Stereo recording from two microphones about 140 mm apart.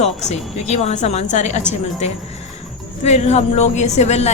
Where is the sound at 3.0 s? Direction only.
55° left (ahead or behind).